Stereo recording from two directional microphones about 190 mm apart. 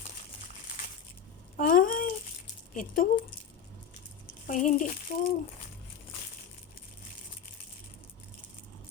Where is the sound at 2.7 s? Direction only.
45° left (ahead or behind).